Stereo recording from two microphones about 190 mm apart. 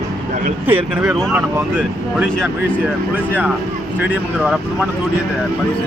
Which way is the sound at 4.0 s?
5° right (ahead or behind).